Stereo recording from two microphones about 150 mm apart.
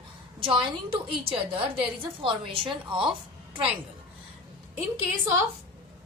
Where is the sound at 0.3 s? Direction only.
35° right (ahead or behind).